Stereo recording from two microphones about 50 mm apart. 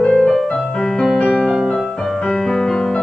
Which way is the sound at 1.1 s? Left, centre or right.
Left.